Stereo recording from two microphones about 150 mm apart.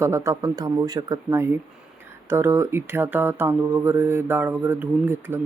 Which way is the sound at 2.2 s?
20° right (ahead or behind).